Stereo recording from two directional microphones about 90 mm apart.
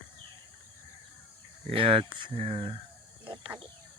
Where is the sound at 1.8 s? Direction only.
75° right (ahead or behind).